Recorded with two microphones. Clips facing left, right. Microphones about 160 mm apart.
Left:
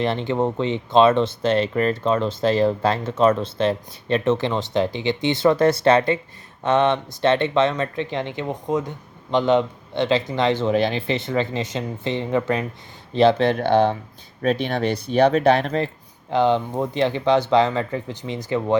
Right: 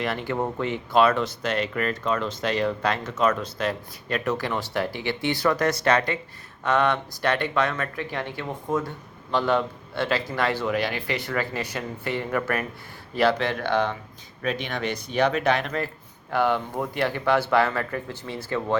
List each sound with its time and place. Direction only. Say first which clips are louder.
0.0 s speech: left 5 dB; 25° left (ahead or behind)